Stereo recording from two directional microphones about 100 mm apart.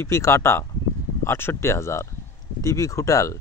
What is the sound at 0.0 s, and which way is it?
Speech, 25° left (ahead or behind).